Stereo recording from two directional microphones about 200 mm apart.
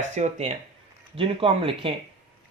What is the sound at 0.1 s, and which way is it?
Speech, 35° right (ahead or behind).